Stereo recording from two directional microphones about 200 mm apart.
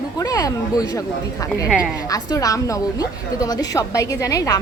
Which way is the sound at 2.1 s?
15° left (ahead or behind).